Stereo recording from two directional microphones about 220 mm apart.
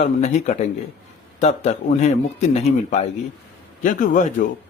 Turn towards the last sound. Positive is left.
turn(degrees=35)  # may be behind; listen again after turning